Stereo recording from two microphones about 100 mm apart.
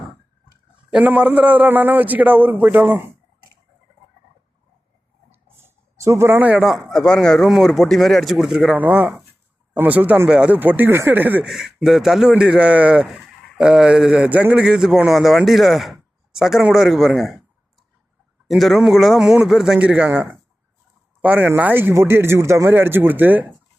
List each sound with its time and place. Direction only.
0.9 s speech: 10° right (ahead or behind)
5.3 s a sound: 25° right (ahead or behind)
6.5 s speech: centre (ahead or behind)
8.8 s speech: 15° right (ahead or behind)
11.4 s speech: 5° right (ahead or behind)
18.4 s speech: centre (ahead or behind); by 23.5 s 20° right (ahead or behind)